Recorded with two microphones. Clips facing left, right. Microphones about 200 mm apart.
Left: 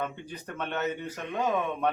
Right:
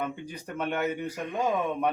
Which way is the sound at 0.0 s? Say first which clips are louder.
Right 1 dB; 10° right (ahead or behind).